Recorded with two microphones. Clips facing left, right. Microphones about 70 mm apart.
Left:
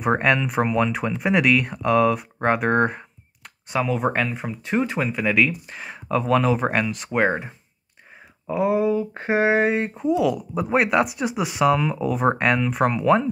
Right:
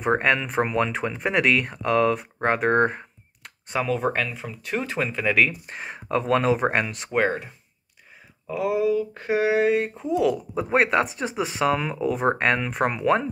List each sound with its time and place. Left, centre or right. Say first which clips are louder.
0.2 s speech: left 2 dB; centre
0.6 s speech: left 2 dB; centre
4.0 s speech: left 2 dB; left; by 5.6 s centre
6.0 s speech: left 1 dB; centre
7.2 s speech: left 3 dB; left
8.5 s a sound: left 2 dB; left
9.7 s speech: left 1 dB; centre
10.3 s speech: left 1 dB; centre
11.7 s speech: left 2 dB; centre